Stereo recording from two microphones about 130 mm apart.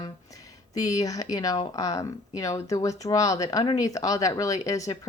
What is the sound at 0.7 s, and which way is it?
Speech, 25° left (ahead or behind).